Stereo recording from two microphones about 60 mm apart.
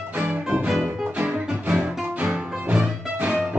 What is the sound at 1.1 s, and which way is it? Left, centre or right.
Music, right.